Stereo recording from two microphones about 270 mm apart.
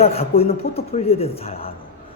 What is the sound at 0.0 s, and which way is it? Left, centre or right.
A woman's voice, left.